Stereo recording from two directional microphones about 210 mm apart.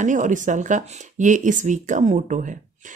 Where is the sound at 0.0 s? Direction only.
35° right (ahead or behind).